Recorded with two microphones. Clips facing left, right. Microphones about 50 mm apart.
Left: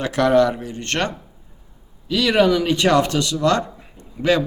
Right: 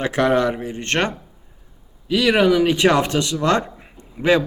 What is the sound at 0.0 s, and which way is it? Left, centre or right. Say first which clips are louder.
A man's voice: left 2 dB; right.